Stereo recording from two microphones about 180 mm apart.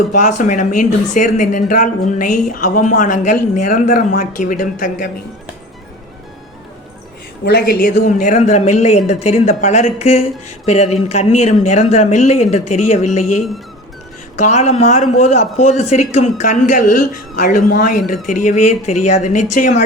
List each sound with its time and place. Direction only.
0.2 s speech: 45° left (ahead or behind)
7.4 s speech: 60° left (ahead or behind); by 13.2 s 40° left (ahead or behind)
14.3 s speech: 40° left (ahead or behind)